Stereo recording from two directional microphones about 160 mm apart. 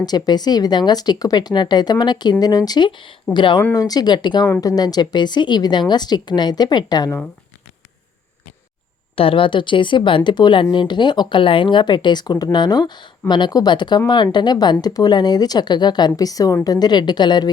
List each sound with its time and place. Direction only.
0.0 s speech: 25° left (ahead or behind)
9.1 s speech: 35° left (ahead or behind)